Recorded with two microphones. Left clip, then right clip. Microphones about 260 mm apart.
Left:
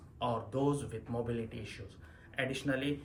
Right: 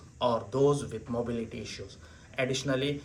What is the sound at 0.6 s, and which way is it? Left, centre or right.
Speech, left.